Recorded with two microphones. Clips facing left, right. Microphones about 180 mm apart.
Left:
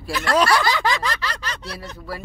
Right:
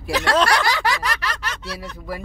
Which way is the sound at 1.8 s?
15° right (ahead or behind).